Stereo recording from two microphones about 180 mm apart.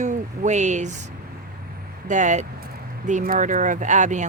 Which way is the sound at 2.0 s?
45° right (ahead or behind).